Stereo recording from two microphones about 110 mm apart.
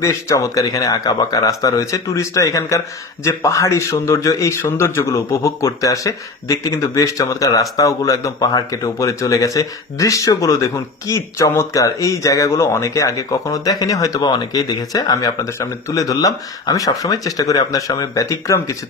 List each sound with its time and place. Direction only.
0.0 s a man's voice: 30° left (ahead or behind)